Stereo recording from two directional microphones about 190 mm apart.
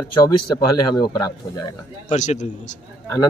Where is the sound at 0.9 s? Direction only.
20° left (ahead or behind).